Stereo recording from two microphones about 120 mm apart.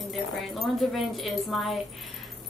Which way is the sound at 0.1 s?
Centre (ahead or behind).